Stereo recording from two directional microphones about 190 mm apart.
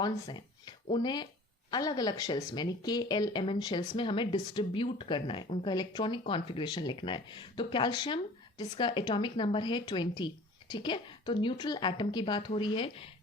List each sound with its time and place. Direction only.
0.0 s speech: 25° left (ahead or behind)